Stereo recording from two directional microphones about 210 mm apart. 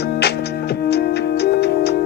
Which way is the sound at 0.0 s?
50° left (ahead or behind).